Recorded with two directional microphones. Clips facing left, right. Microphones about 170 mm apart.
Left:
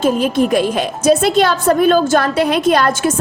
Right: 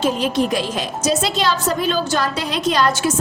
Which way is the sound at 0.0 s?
50° left (ahead or behind).